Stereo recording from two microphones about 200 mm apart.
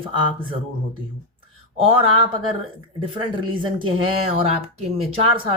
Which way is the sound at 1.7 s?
25° right (ahead or behind).